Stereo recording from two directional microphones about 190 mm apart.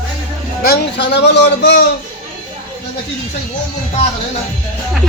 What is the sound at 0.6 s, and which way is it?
A man's voice, 60° left (ahead or behind).